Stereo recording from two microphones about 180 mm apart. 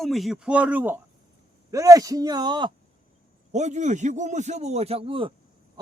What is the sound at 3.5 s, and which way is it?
A man's voice, 40° right (ahead or behind).